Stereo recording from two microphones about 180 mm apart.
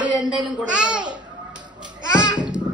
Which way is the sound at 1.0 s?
25° right (ahead or behind).